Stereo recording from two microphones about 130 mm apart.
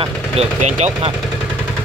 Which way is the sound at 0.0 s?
60° right (ahead or behind).